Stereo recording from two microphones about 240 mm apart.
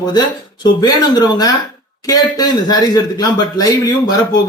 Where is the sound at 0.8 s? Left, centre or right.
Centre.